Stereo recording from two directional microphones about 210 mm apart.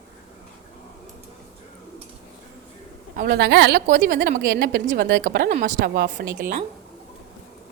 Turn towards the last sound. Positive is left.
turn(degrees=-40)  # may be behind; listen again after turning